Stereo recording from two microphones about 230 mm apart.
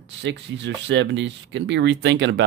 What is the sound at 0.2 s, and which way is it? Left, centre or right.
Speech, right.